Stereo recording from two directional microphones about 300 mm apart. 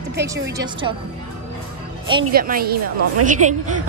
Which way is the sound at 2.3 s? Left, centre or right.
Right.